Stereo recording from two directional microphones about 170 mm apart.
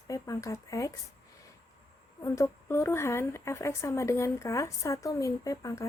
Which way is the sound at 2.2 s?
15° left (ahead or behind).